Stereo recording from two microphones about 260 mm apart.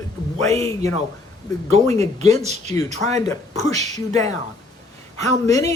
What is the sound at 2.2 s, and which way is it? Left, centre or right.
Speech, right.